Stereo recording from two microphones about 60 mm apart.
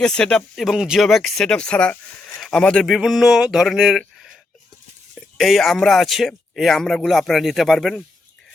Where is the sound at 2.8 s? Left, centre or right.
Centre.